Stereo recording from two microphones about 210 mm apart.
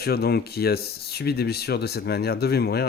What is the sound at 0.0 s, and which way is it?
Speech, 50° left (ahead or behind).